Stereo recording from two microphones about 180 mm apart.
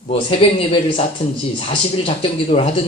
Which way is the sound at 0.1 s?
30° left (ahead or behind).